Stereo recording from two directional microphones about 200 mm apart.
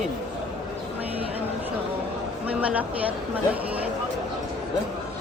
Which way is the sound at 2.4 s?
5° right (ahead or behind).